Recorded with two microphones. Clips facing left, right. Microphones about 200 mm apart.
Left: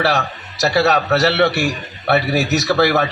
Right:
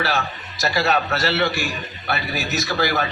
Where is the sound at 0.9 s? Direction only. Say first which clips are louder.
Left 5 dB; 70° left (ahead or behind).